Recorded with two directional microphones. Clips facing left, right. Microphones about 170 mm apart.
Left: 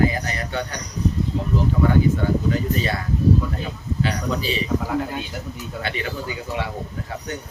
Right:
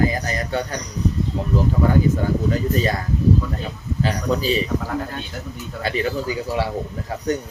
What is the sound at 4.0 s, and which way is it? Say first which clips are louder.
Speech: right 3 dB; 40° right (ahead or behind).